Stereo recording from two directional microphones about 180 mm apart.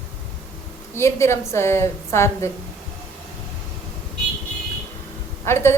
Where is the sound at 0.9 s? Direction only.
15° left (ahead or behind).